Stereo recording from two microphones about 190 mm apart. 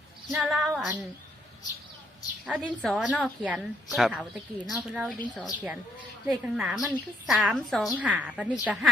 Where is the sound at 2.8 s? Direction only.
5° right (ahead or behind).